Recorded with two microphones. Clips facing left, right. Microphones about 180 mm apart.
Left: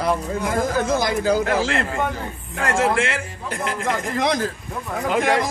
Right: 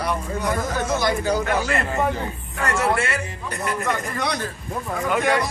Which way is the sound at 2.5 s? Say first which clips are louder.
Left 2 dB; 90° left.